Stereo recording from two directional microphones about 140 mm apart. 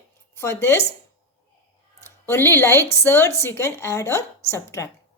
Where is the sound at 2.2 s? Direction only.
15° left (ahead or behind).